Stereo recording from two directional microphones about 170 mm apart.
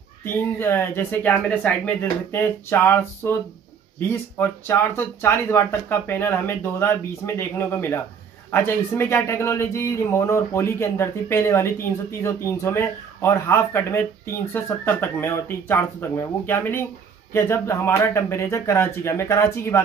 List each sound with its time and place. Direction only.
0.2 s speech: 15° left (ahead or behind)